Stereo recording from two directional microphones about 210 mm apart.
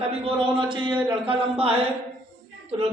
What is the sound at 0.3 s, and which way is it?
A man's voice, 25° right (ahead or behind).